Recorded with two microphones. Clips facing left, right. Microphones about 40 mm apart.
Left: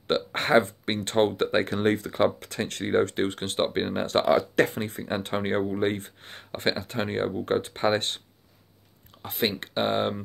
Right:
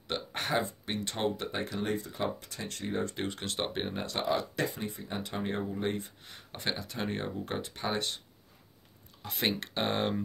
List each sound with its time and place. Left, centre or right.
0.1 s speech: left
3.2 s speech: left
4.0 s speech: left
9.3 s speech: centre